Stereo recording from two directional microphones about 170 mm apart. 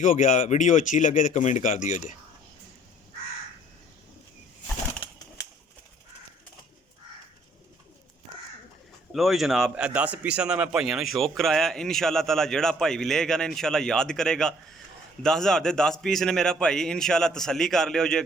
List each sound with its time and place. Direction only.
0.0 s speech: 50° left (ahead or behind)
9.1 s a man's voice: centre (ahead or behind)